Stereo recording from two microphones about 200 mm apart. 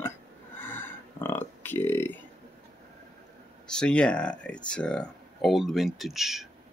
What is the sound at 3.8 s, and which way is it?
Speech, 5° left (ahead or behind).